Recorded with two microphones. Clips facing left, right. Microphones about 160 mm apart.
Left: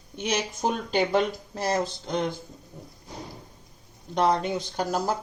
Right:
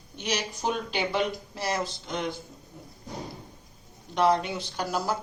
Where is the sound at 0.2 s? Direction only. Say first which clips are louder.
Left 3 dB; 50° left (ahead or behind).